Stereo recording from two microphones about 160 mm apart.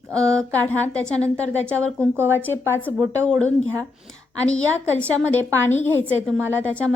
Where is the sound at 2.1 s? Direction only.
15° right (ahead or behind).